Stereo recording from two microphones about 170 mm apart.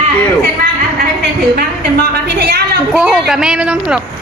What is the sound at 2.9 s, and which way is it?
Speech, 5° right (ahead or behind).